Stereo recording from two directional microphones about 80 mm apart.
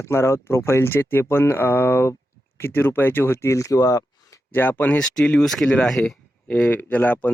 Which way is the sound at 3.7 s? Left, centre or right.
Left.